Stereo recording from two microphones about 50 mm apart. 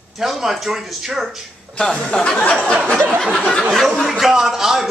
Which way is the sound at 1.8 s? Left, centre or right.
Centre.